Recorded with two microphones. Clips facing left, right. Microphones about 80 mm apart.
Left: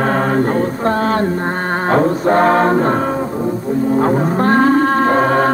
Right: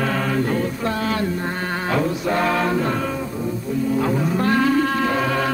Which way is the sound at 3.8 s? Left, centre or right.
Left.